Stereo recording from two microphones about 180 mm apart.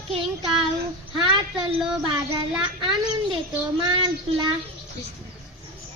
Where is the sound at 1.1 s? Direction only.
25° right (ahead or behind).